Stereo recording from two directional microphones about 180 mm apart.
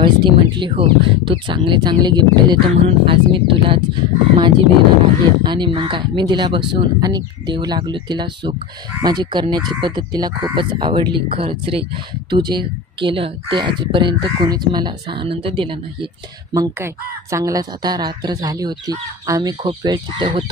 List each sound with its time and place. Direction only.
0.0 s speech: 25° right (ahead or behind)
16.5 s speech: 15° right (ahead or behind)